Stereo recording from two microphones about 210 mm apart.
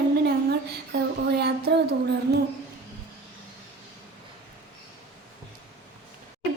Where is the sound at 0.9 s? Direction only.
50° right (ahead or behind).